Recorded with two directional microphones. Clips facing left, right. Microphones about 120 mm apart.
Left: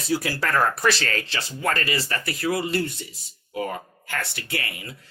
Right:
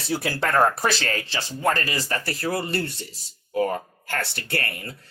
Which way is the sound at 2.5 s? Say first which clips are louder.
Left 2 dB; 60° right (ahead or behind).